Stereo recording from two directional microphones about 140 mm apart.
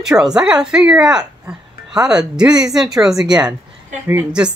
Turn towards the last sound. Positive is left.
turn(degrees=-10)  # may be behind; listen again after turning